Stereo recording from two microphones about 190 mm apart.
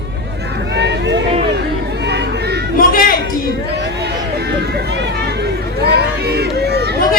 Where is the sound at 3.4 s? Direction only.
60° right (ahead or behind).